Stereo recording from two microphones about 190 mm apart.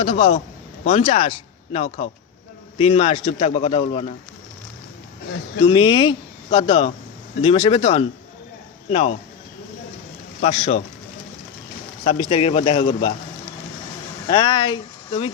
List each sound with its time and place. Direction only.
0.0 s a man's voice: 30° left (ahead or behind)
5.6 s a man's voice: 25° left (ahead or behind)
10.4 s a man's voice: 35° left (ahead or behind)
12.0 s a man's voice: 30° left (ahead or behind)
14.3 s speech: 25° left (ahead or behind)